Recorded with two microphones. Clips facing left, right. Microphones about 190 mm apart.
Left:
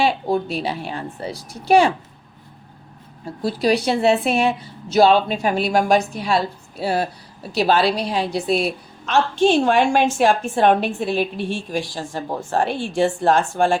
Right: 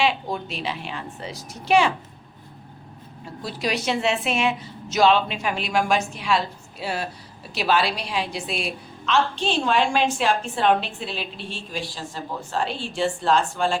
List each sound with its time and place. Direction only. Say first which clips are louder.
0.0 s a woman's voice: left 5 dB; 35° left (ahead or behind)
3.4 s a woman's voice: left 7 dB; 35° left (ahead or behind); by 11.3 s 50° left (ahead or behind)
11.3 s speech: left 10 dB; 10° left (ahead or behind)
11.9 s a woman's voice: left 6 dB; 50° left (ahead or behind)